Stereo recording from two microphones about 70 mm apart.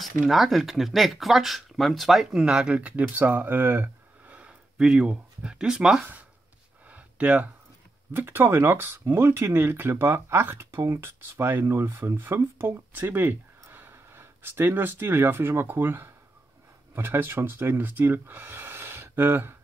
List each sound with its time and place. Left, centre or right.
0.3 s speech: centre
2.4 s speech: centre; by 3.9 s right
4.3 s speech: centre
6.9 s a sound: centre
8.3 s speech: right